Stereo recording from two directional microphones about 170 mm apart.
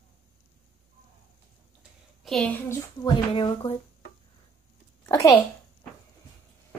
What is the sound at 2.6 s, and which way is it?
Speech, 25° left (ahead or behind).